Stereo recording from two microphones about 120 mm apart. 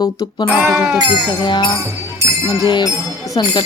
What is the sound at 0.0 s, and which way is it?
Speech, 30° left (ahead or behind).